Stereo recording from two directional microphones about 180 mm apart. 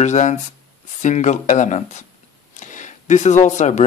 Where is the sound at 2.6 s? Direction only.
45° left (ahead or behind).